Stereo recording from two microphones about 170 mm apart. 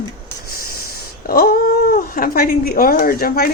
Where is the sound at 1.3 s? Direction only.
60° left (ahead or behind).